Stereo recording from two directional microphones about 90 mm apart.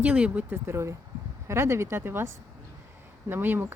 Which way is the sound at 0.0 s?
15° right (ahead or behind).